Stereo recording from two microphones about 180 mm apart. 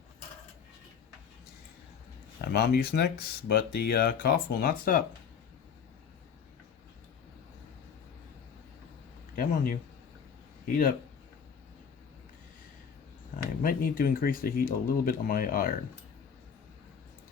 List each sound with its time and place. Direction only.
2.4 s speech: 65° left (ahead or behind)
9.3 s speech: 50° left (ahead or behind)
13.6 s speech: 50° left (ahead or behind)